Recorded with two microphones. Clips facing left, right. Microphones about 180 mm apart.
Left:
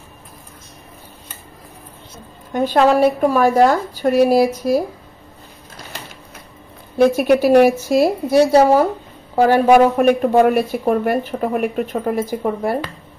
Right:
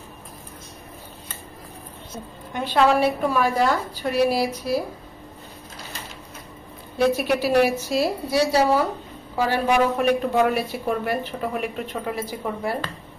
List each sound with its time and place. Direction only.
2.5 s a woman's voice: 45° left (ahead or behind)
7.0 s a woman's voice: 50° left (ahead or behind)